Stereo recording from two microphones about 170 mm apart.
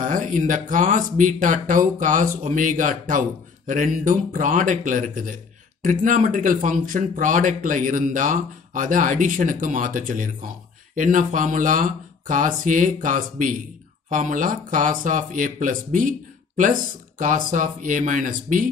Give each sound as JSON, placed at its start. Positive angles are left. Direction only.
{"t": 0.0, "sound": "speech", "side_deg": -50}